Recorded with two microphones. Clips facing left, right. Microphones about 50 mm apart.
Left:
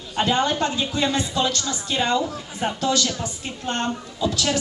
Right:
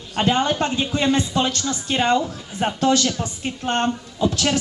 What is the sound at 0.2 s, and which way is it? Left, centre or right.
Speech, right.